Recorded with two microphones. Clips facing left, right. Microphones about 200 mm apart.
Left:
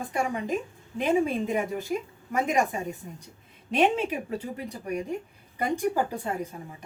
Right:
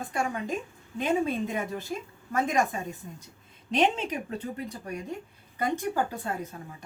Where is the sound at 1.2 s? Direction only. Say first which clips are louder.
Left 3 dB; 10° left (ahead or behind).